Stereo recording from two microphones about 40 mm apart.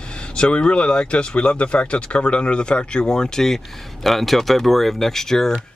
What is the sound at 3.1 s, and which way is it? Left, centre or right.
Speech, centre.